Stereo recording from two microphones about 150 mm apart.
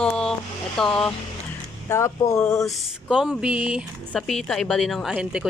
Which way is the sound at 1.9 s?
20° left (ahead or behind).